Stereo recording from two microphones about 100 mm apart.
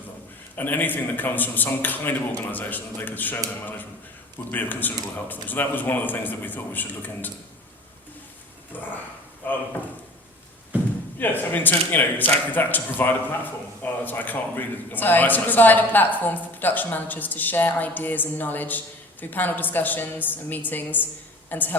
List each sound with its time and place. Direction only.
0.5 s a man's voice: 20° left (ahead or behind)
4.5 s a man's voice: 20° left (ahead or behind)
8.7 s a sound: 20° left (ahead or behind)
9.4 s speech: 20° left (ahead or behind)
11.2 s a man's voice: 20° left (ahead or behind)